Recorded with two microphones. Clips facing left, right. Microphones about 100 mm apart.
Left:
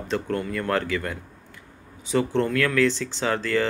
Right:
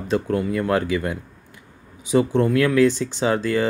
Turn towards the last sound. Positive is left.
turn(degrees=-15)  # may be behind; listen again after turning